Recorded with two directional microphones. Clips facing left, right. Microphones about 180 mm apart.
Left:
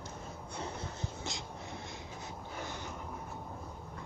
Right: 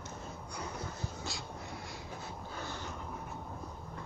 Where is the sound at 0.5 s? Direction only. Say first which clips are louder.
Left 1 dB; 25° left (ahead or behind).